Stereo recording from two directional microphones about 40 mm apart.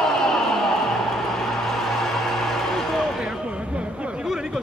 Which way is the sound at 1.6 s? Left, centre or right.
Centre.